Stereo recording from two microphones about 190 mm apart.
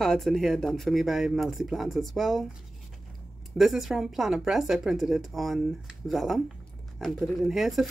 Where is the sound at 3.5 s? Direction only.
Centre (ahead or behind).